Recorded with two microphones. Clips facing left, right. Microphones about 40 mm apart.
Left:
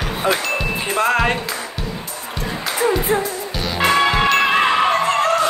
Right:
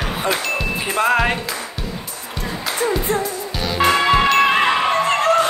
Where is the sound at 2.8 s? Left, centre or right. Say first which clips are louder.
Left 2 dB; centre.